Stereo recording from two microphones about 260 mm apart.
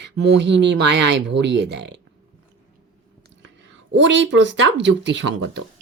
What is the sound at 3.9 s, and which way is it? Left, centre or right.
Speech, right.